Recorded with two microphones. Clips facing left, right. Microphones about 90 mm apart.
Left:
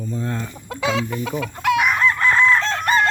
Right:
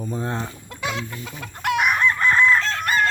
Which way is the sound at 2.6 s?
35° left (ahead or behind).